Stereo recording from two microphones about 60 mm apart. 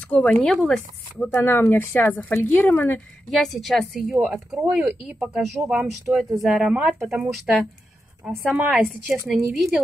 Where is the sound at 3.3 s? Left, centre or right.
Centre.